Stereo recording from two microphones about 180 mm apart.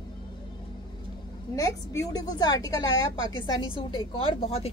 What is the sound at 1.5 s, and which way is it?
A woman's voice, 20° left (ahead or behind).